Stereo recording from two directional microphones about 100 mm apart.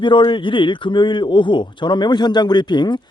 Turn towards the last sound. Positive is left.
turn(degrees=50)  # may be behind; listen again after turning